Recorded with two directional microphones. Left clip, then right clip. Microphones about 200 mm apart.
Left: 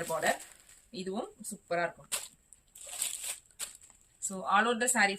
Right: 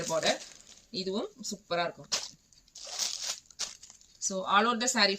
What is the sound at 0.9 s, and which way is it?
Speech, 15° left (ahead or behind).